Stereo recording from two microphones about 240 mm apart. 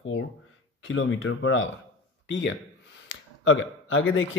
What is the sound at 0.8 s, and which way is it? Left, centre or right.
A man's voice, left.